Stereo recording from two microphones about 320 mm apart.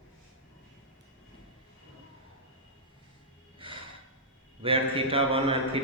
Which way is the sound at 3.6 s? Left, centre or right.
Centre.